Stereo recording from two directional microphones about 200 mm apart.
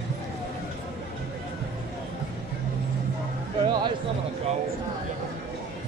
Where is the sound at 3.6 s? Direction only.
20° right (ahead or behind).